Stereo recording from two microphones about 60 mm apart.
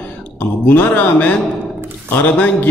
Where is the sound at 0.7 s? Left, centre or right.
Left.